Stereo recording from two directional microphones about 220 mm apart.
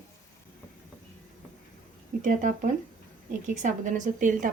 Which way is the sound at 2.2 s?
35° right (ahead or behind).